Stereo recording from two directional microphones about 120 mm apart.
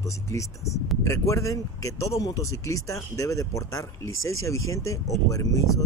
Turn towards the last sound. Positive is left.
turn(degrees=25)  # may be behind; listen again after turning